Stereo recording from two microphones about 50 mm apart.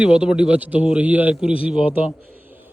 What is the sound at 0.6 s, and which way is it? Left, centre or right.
Speech, right.